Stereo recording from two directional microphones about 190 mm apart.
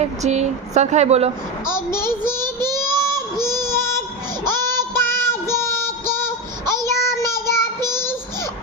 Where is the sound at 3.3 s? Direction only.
20° right (ahead or behind).